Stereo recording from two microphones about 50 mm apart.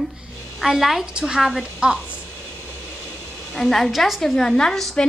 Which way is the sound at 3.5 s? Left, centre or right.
Centre.